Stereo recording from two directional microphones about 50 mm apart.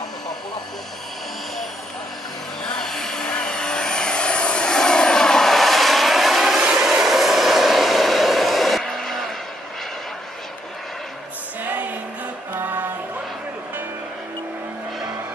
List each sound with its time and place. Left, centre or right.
2.6 s vehicle: centre
11.6 s music: right